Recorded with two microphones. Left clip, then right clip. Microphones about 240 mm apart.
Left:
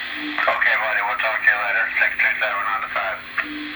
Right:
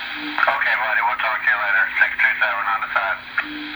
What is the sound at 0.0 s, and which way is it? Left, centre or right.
Radio, right.